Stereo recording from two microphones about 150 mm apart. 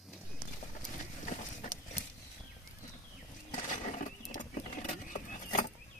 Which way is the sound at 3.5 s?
60° left (ahead or behind).